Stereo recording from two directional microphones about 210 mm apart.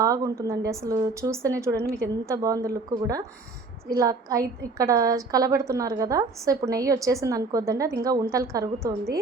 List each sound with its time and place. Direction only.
0.0 s a woman's voice: 15° right (ahead or behind)